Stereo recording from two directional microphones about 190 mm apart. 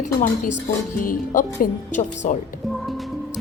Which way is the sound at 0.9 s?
45° left (ahead or behind).